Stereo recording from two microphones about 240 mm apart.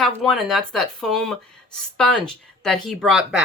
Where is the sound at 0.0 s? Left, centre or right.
Centre.